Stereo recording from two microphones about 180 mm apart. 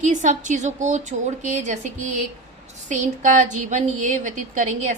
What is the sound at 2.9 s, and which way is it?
A woman's voice, 45° right (ahead or behind).